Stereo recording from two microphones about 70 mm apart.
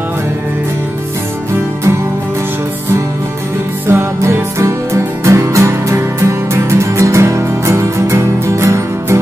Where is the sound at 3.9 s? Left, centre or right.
Right.